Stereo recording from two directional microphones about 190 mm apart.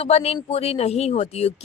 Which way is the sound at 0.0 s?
30° left (ahead or behind).